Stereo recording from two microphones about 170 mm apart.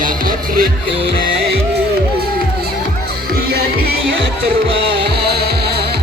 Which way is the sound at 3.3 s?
65° right (ahead or behind).